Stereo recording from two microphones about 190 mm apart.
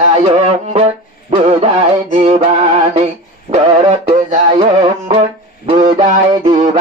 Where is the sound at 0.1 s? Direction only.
30° right (ahead or behind).